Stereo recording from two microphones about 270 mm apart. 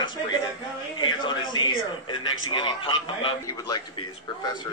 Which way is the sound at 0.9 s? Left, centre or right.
Centre.